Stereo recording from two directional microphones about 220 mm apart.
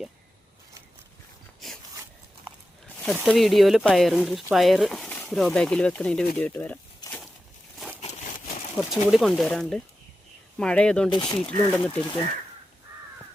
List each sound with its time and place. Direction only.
3.0 s speech: centre (ahead or behind)
8.9 s speech: centre (ahead or behind)
11.1 s speech: 20° left (ahead or behind)
11.3 s speech: 5° left (ahead or behind)